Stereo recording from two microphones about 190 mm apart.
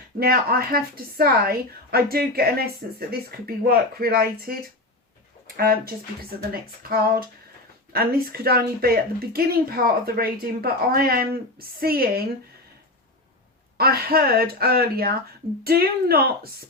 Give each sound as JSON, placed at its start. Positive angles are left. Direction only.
{"t": 0.2, "sound": "speech", "side_deg": -55}
{"t": 5.5, "sound": "speech", "side_deg": -50}
{"t": 13.7, "sound": "speech", "side_deg": -55}